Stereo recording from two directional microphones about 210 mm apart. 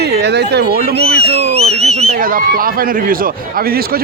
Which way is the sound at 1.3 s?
30° right (ahead or behind).